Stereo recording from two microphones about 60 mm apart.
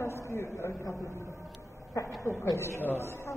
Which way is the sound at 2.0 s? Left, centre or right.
Left.